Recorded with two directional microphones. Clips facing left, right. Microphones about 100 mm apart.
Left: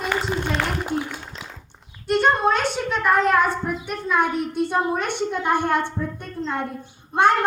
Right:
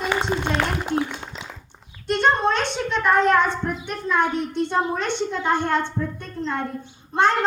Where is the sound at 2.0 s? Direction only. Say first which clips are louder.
Left 1 dB; 10° left (ahead or behind).